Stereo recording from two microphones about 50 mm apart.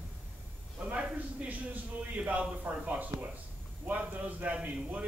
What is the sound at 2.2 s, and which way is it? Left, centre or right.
A man's voice, right.